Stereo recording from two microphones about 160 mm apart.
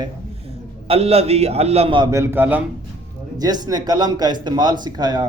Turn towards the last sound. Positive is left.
turn(degrees=-25)  # may be behind; listen again after turning